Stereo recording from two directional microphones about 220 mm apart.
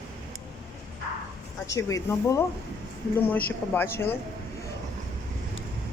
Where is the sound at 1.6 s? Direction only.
15° left (ahead or behind).